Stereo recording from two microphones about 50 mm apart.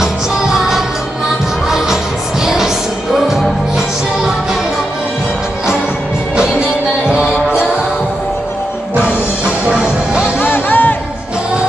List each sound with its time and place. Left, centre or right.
0.0 s music: centre
2.4 s music: centre
8.9 s music: centre
10.4 s a sound: left